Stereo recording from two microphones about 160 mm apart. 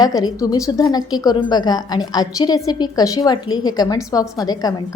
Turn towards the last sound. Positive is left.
turn(degrees=25)  # may be behind; listen again after turning